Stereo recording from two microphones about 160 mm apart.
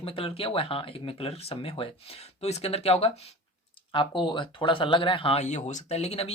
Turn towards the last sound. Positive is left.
turn(degrees=40)  # may be behind; listen again after turning